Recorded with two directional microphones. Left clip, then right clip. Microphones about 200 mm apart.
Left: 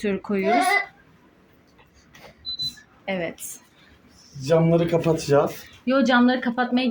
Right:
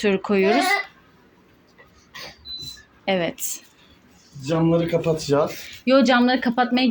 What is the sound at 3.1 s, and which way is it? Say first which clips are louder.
Speech: right 5 dB; 35° right (ahead or behind).